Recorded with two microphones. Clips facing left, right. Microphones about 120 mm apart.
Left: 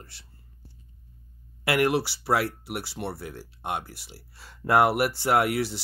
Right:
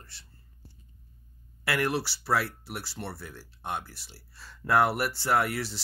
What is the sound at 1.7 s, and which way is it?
Speech, 15° left (ahead or behind).